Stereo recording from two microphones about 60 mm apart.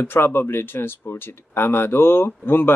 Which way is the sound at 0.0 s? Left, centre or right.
Left.